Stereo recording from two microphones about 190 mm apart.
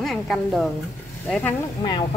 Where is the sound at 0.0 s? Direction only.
Centre (ahead or behind).